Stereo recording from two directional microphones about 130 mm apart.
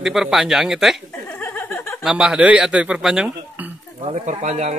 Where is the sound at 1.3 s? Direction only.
15° left (ahead or behind).